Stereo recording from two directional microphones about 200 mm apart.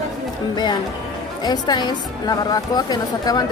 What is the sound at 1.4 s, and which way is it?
A woman's voice, 20° left (ahead or behind).